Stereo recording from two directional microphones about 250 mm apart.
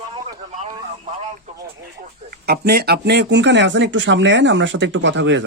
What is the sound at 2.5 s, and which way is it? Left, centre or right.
Speech, right.